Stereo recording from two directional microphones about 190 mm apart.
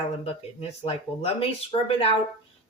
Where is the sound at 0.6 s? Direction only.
35° left (ahead or behind).